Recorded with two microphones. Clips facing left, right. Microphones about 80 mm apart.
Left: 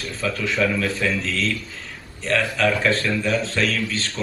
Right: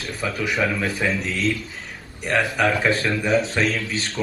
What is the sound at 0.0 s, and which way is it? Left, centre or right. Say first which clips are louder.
A man's voice: even; centre.